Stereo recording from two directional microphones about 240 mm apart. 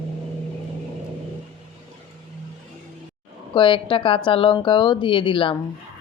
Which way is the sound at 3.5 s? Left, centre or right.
Left.